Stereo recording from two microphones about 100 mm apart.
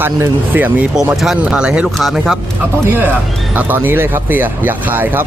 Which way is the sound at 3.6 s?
20° right (ahead or behind).